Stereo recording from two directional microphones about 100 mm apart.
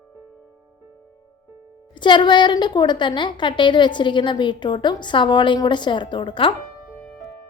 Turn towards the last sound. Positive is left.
turn(degrees=55)  # may be behind; listen again after turning